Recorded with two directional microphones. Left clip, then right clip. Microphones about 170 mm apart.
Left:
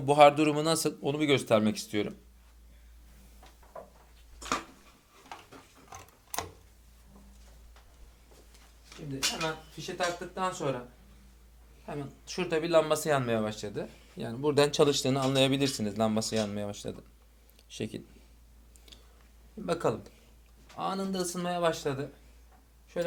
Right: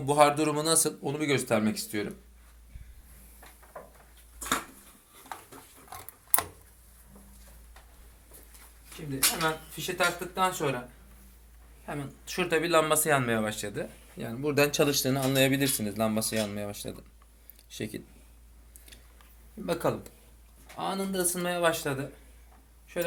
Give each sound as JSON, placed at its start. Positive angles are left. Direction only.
{"t": 0.0, "sound": "speech", "side_deg": 55}
{"t": 9.8, "sound": "speech", "side_deg": 10}
{"t": 11.9, "sound": "speech", "side_deg": 20}
{"t": 19.6, "sound": "speech", "side_deg": 30}